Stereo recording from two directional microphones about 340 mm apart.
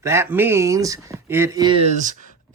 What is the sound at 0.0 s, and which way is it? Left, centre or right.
Speech, centre.